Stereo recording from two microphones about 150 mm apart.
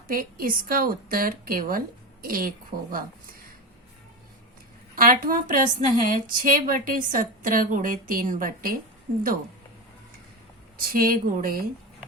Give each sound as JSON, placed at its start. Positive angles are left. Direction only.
{"t": 0.1, "sound": "a woman's voice", "side_deg": -70}
{"t": 4.9, "sound": "a woman's voice", "side_deg": -70}
{"t": 10.8, "sound": "a woman's voice", "side_deg": -75}